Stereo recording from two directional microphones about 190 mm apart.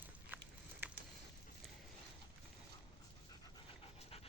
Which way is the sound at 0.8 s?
10° right (ahead or behind).